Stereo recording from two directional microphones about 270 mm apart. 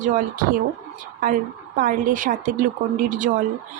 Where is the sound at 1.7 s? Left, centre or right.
Right.